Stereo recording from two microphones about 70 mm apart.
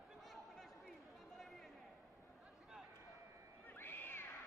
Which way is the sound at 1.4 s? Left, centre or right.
Centre.